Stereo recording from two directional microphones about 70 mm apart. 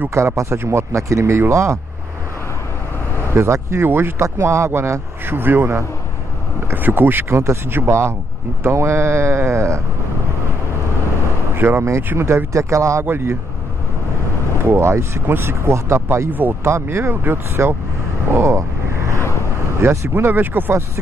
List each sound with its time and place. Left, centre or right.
0.4 s speech: right
3.3 s speech: right
11.5 s speech: right
12.5 s speech: right
14.7 s speech: right
16.3 s speech: right
16.6 s speech: right
18.3 s vehicle: right
19.8 s speech: right